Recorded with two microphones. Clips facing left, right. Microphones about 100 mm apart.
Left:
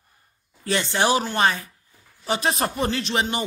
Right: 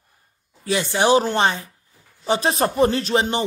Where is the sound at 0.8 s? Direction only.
20° right (ahead or behind).